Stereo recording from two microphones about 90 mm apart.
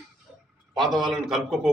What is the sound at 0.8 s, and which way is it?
Speech, centre (ahead or behind).